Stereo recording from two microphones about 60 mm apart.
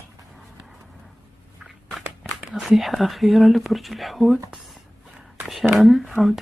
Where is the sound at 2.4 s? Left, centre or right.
Centre.